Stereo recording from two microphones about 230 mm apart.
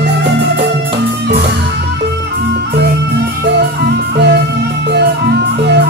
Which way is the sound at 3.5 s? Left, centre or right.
Right.